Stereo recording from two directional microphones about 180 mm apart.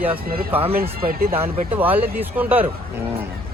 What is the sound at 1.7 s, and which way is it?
Speech, 10° right (ahead or behind).